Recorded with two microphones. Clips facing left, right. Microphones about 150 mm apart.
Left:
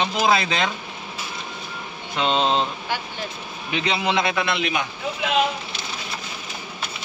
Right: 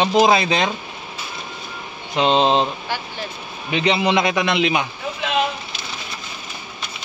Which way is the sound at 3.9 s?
15° right (ahead or behind).